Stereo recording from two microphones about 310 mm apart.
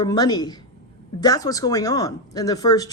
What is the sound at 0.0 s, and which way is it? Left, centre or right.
Speech, centre.